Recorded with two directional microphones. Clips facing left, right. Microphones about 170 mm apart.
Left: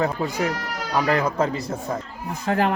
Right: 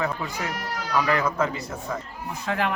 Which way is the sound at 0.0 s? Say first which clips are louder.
Left 5 dB; 35° left (ahead or behind).